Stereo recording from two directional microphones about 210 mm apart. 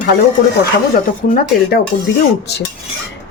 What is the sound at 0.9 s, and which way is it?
Speech, 40° left (ahead or behind).